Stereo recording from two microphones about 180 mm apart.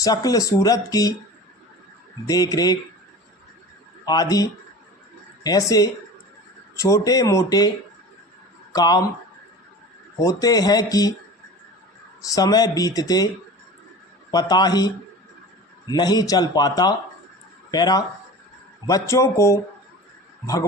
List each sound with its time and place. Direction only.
0.0 s speech: 20° left (ahead or behind)
2.2 s speech: 20° left (ahead or behind)
4.0 s speech: 20° left (ahead or behind)
8.7 s speech: 20° left (ahead or behind)
10.2 s speech: 20° left (ahead or behind)
12.3 s speech: 20° left (ahead or behind)
14.3 s a man's voice: 20° left (ahead or behind)